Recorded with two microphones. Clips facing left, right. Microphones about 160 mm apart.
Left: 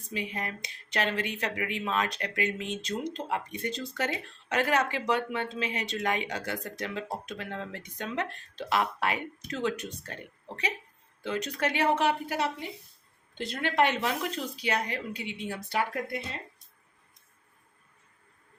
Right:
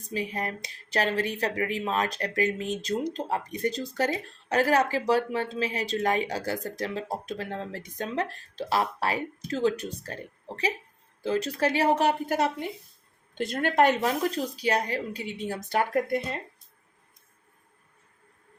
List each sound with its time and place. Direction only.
0.1 s speech: 40° right (ahead or behind)